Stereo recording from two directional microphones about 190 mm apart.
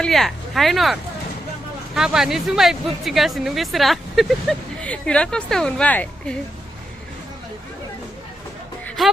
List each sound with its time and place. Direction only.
0.0 s speech: centre (ahead or behind)
2.0 s speech: 5° right (ahead or behind)